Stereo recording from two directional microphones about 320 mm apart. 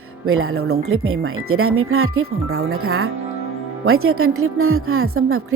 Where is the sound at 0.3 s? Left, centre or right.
Right.